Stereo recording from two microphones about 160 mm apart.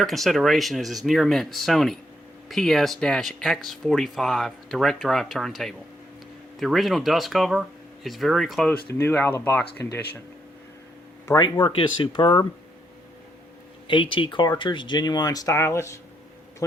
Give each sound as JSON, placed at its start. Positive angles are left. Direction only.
{"t": 0.0, "sound": "speech", "side_deg": 0}
{"t": 8.9, "sound": "speech", "side_deg": 15}
{"t": 11.3, "sound": "speech", "side_deg": 25}
{"t": 13.8, "sound": "speech", "side_deg": 30}